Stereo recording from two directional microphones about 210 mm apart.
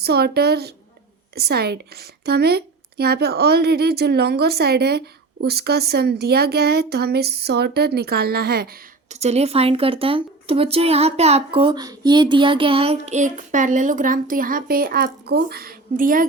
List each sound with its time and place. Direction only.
0.0 s speech: 50° right (ahead or behind)
9.0 s speech: 30° right (ahead or behind)